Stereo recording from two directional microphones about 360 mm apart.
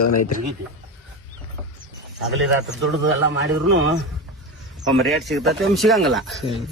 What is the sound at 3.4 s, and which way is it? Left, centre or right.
Speech, right.